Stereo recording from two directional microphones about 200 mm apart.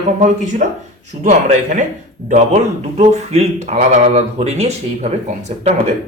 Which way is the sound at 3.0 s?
35° right (ahead or behind).